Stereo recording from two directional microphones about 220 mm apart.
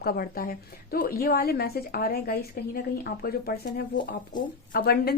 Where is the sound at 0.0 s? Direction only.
40° left (ahead or behind).